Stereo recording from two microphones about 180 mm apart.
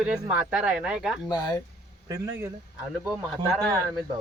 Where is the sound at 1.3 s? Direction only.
20° left (ahead or behind).